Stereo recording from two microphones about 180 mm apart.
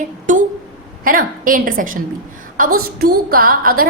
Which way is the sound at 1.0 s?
50° right (ahead or behind).